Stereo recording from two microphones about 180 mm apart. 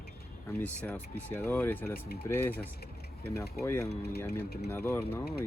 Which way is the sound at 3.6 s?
15° left (ahead or behind).